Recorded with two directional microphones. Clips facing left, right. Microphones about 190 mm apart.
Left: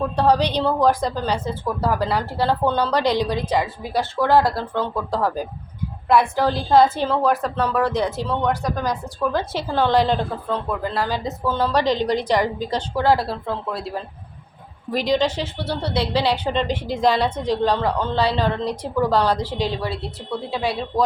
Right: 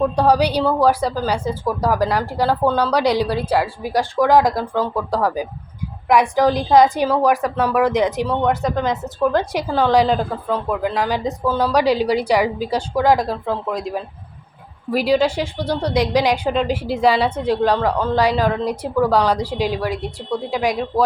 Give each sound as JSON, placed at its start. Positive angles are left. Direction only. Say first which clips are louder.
{"t": 0.2, "sound": "a woman's voice", "louder": "even", "side_deg": -10}